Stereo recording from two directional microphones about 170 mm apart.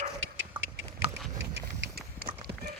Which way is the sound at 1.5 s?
70° right (ahead or behind).